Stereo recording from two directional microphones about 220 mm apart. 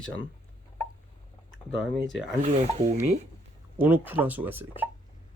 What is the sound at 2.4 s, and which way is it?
Speech, 30° right (ahead or behind).